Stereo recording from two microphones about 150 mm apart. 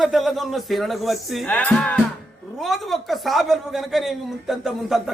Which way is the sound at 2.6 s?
Centre (ahead or behind).